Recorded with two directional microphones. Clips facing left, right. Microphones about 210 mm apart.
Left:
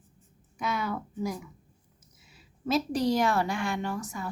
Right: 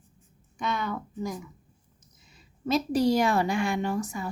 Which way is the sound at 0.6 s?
5° left (ahead or behind).